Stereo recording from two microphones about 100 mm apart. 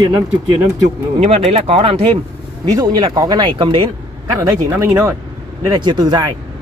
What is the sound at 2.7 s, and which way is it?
Speech, 40° right (ahead or behind).